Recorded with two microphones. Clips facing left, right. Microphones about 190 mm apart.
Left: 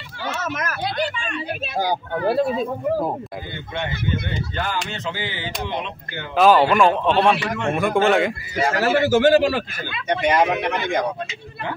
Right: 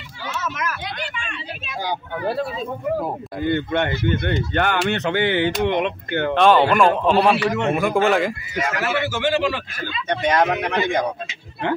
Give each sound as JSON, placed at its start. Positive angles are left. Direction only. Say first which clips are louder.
{"t": 0.2, "sound": "speech", "louder": "left 1 dB", "side_deg": 50}
{"t": 3.4, "sound": "speech", "louder": "right 12 dB", "side_deg": -60}
{"t": 6.3, "sound": "a man's voice", "louder": "left 1 dB", "side_deg": 0}
{"t": 8.5, "sound": "a man's voice", "louder": "left 5 dB", "side_deg": 35}
{"t": 10.0, "sound": "a man's voice", "louder": "left 1 dB", "side_deg": 10}